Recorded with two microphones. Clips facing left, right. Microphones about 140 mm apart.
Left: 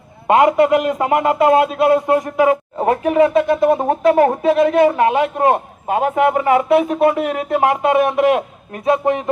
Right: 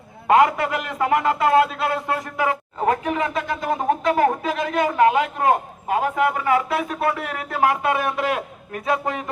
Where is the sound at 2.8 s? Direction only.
30° left (ahead or behind).